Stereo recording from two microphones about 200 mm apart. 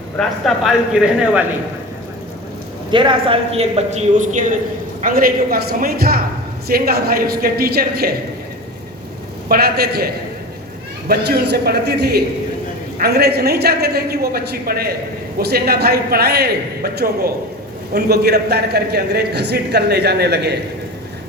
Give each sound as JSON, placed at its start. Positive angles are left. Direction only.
{"t": 0.2, "sound": "speech", "side_deg": 0}
{"t": 2.9, "sound": "a man's voice", "side_deg": -25}
{"t": 9.5, "sound": "a man's voice", "side_deg": -50}
{"t": 11.1, "sound": "a man's voice", "side_deg": -55}